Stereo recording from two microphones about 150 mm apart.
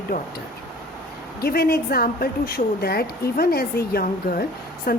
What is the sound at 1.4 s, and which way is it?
A woman's voice, 90° left.